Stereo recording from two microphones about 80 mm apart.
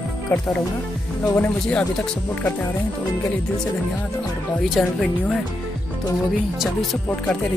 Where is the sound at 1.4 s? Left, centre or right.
Centre.